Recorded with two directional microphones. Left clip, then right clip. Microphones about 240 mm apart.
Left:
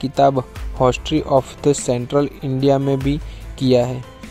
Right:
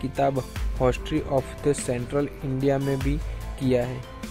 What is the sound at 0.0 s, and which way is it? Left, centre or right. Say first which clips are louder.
Speech: left 9 dB; left.